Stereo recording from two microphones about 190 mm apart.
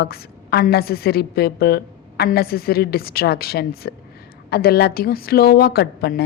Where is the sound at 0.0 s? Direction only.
55° left (ahead or behind).